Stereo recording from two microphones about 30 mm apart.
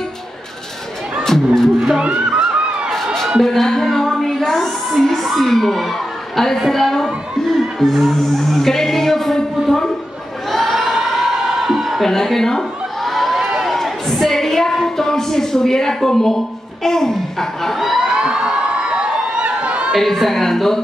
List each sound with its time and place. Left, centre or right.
1.2 s speech: centre
2.0 s music: right
3.0 s a sound: centre
3.4 s music: centre
4.5 s speech: centre
10.5 s a sound: centre
12.0 s chuckle: centre
13.3 s run: centre
13.7 s a sound: centre
16.8 s speech: centre
18.1 s crowd: right
19.4 s chatter: right
20.0 s speech: centre